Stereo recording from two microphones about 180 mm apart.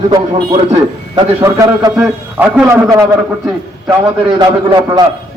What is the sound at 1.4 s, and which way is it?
Speech, 20° right (ahead or behind).